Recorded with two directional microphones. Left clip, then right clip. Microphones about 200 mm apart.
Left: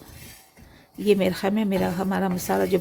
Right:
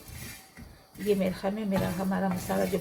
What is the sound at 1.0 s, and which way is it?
Speech, 60° left (ahead or behind).